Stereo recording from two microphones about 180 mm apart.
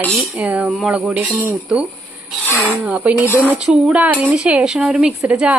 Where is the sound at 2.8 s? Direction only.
10° right (ahead or behind).